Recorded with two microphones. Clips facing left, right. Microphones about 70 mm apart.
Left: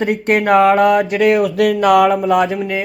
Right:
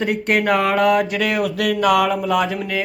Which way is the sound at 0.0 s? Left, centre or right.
Left.